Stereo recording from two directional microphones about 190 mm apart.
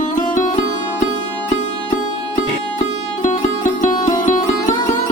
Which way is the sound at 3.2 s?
40° left (ahead or behind).